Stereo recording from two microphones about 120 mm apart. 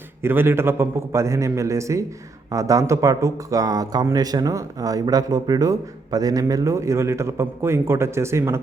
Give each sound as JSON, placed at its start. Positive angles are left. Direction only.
{"t": 0.2, "sound": "speech", "side_deg": -20}